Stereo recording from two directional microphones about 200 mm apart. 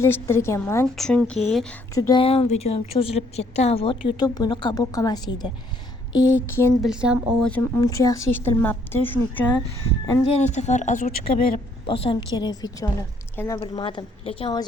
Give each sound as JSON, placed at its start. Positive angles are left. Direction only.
{"t": 0.0, "sound": "speech", "side_deg": 15}
{"t": 2.0, "sound": "a woman's voice", "side_deg": 20}
{"t": 6.8, "sound": "speech", "side_deg": -5}
{"t": 7.5, "sound": "speech", "side_deg": 15}
{"t": 10.2, "sound": "a woman's voice", "side_deg": 35}
{"t": 11.9, "sound": "a woman's voice", "side_deg": 25}
{"t": 13.6, "sound": "a woman's voice", "side_deg": 25}